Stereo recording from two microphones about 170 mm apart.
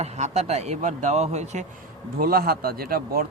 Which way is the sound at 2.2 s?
60° right (ahead or behind).